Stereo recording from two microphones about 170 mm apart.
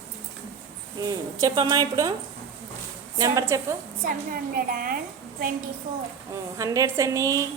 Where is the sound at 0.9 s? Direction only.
25° right (ahead or behind).